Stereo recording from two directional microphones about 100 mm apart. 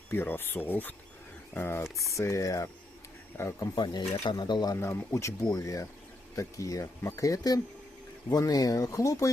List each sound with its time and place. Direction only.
0.1 s speech: 20° left (ahead or behind); by 4.8 s 45° left (ahead or behind)
4.8 s speech: 30° left (ahead or behind)